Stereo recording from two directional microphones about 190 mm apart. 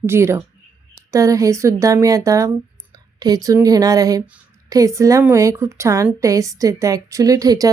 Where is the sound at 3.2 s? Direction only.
20° right (ahead or behind).